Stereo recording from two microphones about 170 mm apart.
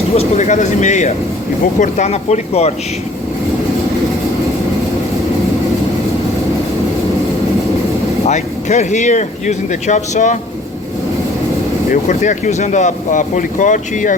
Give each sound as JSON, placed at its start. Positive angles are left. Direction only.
{"t": 0.1, "sound": "speech", "side_deg": 40}
{"t": 8.2, "sound": "speech", "side_deg": 45}
{"t": 11.9, "sound": "speech", "side_deg": 50}